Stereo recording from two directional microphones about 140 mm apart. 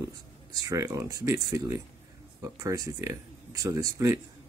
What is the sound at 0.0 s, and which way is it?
Speech, 25° right (ahead or behind).